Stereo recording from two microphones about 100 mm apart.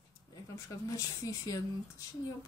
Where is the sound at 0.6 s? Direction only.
35° left (ahead or behind).